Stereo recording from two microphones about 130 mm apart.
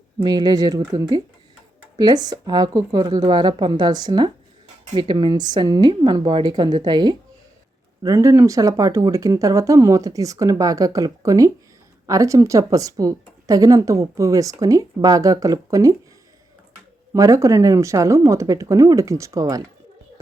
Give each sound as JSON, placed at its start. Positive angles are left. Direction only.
{"t": 0.2, "sound": "speech", "side_deg": -35}
{"t": 8.0, "sound": "speech", "side_deg": -25}
{"t": 17.2, "sound": "speech", "side_deg": -25}